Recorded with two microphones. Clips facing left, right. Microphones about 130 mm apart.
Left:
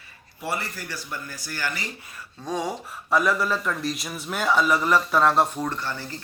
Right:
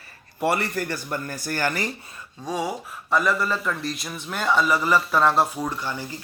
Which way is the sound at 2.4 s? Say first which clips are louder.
Right 1 dB; 5° right (ahead or behind).